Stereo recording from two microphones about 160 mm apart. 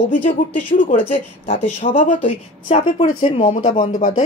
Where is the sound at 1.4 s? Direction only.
45° left (ahead or behind).